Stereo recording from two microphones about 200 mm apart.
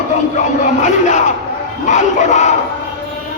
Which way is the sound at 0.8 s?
40° left (ahead or behind).